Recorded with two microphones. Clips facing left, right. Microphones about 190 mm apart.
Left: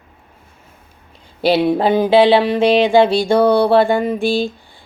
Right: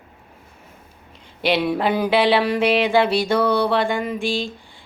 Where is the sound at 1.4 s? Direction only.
30° left (ahead or behind).